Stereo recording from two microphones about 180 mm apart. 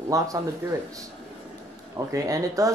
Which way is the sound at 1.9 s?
20° right (ahead or behind).